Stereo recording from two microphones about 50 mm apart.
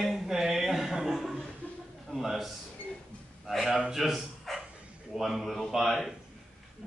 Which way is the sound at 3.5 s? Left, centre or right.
Centre.